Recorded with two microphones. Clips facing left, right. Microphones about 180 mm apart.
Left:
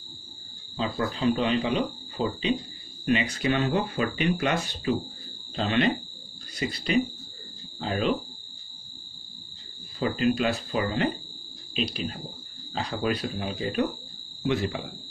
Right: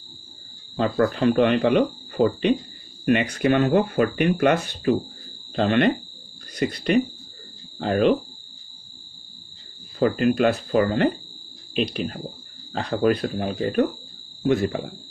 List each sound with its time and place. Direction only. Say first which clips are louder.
0.7 s speech: right 8 dB; 60° right (ahead or behind)
9.9 s speech: right 5 dB; 55° right (ahead or behind)